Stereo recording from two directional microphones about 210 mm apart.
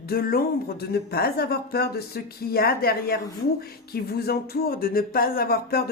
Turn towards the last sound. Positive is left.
turn(degrees=45)  # may be behind; listen again after turning